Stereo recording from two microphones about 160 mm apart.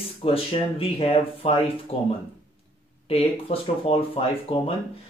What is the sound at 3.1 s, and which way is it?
Speech, 40° left (ahead or behind).